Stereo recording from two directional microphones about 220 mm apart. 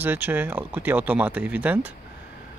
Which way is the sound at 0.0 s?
10° right (ahead or behind).